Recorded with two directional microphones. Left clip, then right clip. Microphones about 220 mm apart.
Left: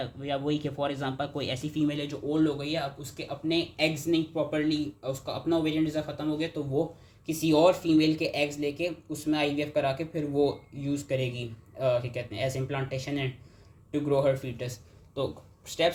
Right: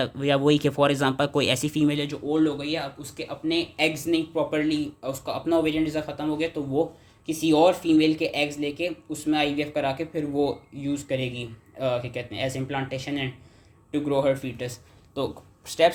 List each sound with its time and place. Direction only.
0.0 s speech: 50° right (ahead or behind); by 2.1 s 30° right (ahead or behind)
2.3 s speech: 10° right (ahead or behind)
7.3 s speech: 5° right (ahead or behind)